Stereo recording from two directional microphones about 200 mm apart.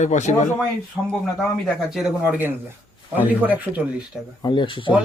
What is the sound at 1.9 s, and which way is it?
Speech, 5° right (ahead or behind).